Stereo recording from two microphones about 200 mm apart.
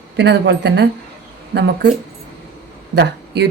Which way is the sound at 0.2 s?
60° right (ahead or behind).